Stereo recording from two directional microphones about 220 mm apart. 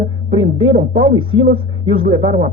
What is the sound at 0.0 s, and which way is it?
Speech, 25° right (ahead or behind).